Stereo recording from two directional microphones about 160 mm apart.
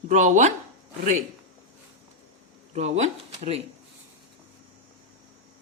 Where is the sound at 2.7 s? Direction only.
45° right (ahead or behind).